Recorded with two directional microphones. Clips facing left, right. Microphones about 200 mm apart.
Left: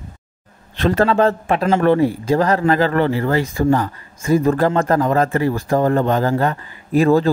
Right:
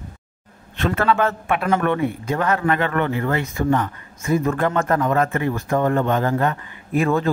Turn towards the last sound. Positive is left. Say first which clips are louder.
# left 6 dB
turn(degrees=35)  # may be behind; listen again after turning